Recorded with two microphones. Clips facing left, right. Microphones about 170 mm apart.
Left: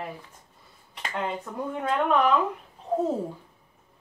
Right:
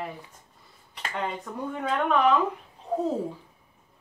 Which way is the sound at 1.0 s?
Centre (ahead or behind).